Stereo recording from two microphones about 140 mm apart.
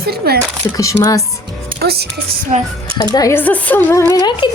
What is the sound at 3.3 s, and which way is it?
A woman's voice, 10° left (ahead or behind).